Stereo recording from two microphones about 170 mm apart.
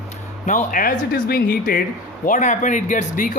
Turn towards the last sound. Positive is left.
turn(degrees=50)  # may be behind; listen again after turning